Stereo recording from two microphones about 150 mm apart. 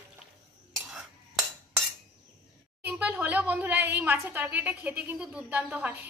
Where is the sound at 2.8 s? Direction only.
10° right (ahead or behind).